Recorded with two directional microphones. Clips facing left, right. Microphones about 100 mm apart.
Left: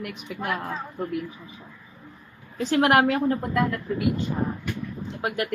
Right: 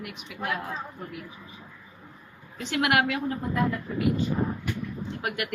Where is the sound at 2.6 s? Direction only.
40° left (ahead or behind).